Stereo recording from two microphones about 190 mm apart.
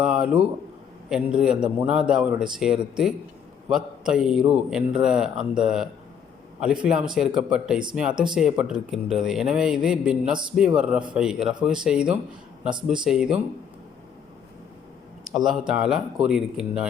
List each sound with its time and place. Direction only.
0.0 s a man's voice: 5° right (ahead or behind)
7.1 s a man's voice: 5° right (ahead or behind)
12.7 s speech: 25° right (ahead or behind)
13.1 s a man's voice: 5° right (ahead or behind)
15.4 s a man's voice: 5° right (ahead or behind)